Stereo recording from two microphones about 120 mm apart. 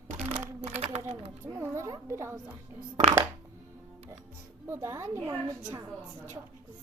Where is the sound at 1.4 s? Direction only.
20° right (ahead or behind).